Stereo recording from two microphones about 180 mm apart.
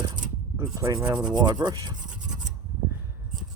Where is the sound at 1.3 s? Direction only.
25° right (ahead or behind).